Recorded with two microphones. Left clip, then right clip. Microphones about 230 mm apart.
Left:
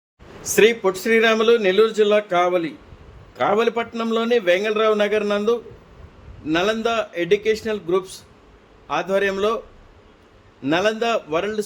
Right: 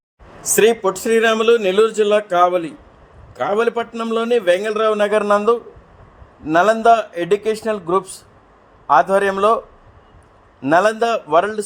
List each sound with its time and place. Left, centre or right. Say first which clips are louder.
0.4 s a man's voice: right 2 dB; right
6.6 s a man's voice: right 9 dB; centre
10.6 s a man's voice: right 5 dB; centre